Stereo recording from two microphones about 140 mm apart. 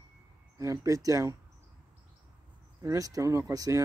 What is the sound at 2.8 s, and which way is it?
Speech, 25° right (ahead or behind).